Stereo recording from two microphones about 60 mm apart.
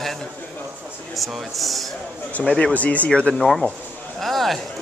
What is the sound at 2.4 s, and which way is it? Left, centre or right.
Speech, centre.